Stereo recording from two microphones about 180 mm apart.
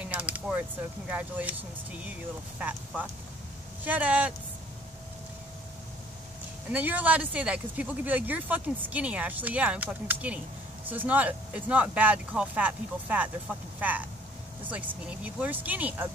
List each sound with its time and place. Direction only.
0.0 s a sound: 10° right (ahead or behind)
2.6 s speech: 10° right (ahead or behind)
6.7 s speech: 10° right (ahead or behind)